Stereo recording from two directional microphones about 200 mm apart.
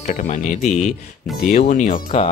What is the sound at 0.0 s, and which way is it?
Speech, 40° left (ahead or behind).